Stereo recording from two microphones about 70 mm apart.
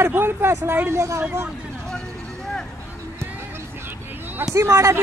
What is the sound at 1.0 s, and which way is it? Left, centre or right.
Speech, right.